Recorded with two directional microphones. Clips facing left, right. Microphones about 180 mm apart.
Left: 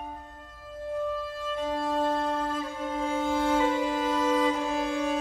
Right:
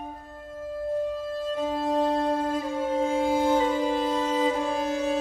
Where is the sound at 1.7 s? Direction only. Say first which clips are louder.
Even; 20° right (ahead or behind).